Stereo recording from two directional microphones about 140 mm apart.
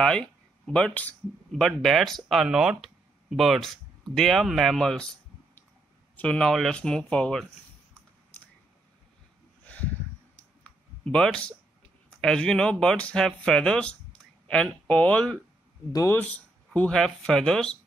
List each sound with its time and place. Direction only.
0.0 s speech: 5° left (ahead or behind)
6.1 s speech: 5° left (ahead or behind)
10.6 s a sound: 5° left (ahead or behind)
12.2 s speech: 5° left (ahead or behind)
15.9 s speech: 25° left (ahead or behind)
16.2 s speech: 10° left (ahead or behind)